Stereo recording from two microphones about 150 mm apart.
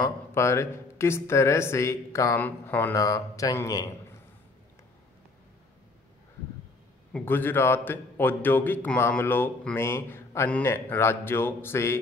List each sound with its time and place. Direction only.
0.3 s speech: 20° left (ahead or behind)
7.1 s a man's voice: 10° left (ahead or behind)